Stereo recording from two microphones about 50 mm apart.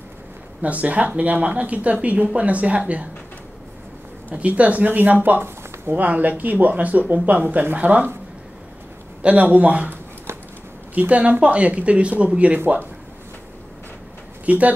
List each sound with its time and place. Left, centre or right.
0.6 s speech: right
4.3 s speech: right
9.2 s speech: right
11.0 s speech: right
12.5 s speech: right
14.4 s speech: right